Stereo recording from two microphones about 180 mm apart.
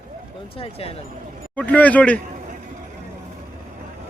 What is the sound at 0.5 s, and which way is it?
Speech, 30° left (ahead or behind).